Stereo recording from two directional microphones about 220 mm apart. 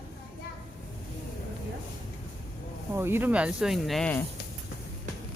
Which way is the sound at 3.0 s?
10° right (ahead or behind).